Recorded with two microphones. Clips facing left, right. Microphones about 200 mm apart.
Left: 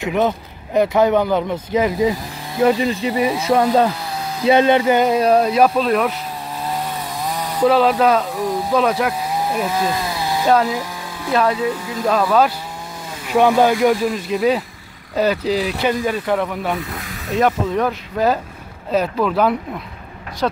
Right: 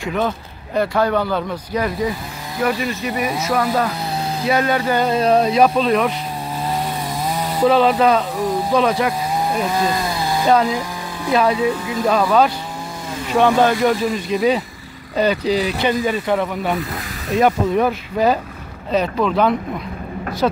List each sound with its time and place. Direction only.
0.0 s speech: 15° left (ahead or behind)
7.6 s speech: centre (ahead or behind)